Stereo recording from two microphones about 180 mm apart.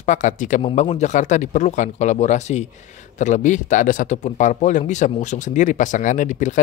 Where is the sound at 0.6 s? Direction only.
35° left (ahead or behind).